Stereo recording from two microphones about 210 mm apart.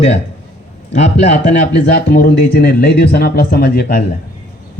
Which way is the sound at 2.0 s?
40° left (ahead or behind).